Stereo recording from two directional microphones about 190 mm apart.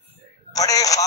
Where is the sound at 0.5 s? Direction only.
20° left (ahead or behind).